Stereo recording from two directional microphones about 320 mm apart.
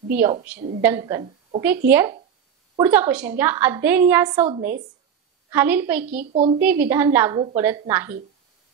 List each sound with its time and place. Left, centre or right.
0.1 s a woman's voice: centre
6.3 s a woman's voice: centre
6.6 s a woman's voice: centre